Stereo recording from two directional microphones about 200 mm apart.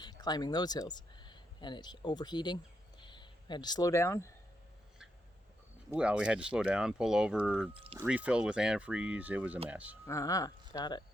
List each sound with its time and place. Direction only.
0.0 s speech: 20° left (ahead or behind)
5.9 s speech: 5° right (ahead or behind)
7.7 s speech: 25° right (ahead or behind)
7.9 s speech: 5° right (ahead or behind)
10.1 s speech: 15° left (ahead or behind)